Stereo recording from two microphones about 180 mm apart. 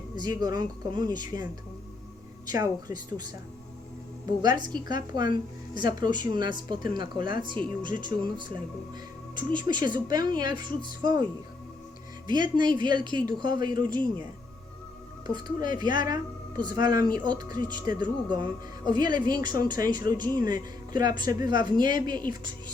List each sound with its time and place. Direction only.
0.2 s speech: 20° right (ahead or behind)
2.5 s speech: 20° right (ahead or behind)
4.4 s speech: 25° right (ahead or behind)
12.3 s speech: 25° right (ahead or behind)
15.3 s speech: 25° right (ahead or behind)